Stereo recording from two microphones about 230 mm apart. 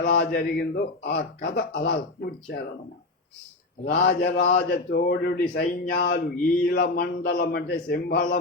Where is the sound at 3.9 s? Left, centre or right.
Left.